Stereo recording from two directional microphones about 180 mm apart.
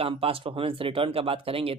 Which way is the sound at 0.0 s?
30° right (ahead or behind).